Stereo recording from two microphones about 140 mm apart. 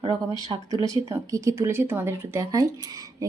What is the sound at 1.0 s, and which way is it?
Speech, 20° right (ahead or behind).